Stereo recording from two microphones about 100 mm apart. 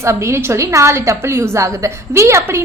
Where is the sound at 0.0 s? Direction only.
30° right (ahead or behind).